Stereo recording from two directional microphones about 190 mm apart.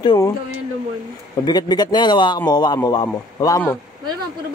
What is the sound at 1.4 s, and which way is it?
Speech, 20° left (ahead or behind).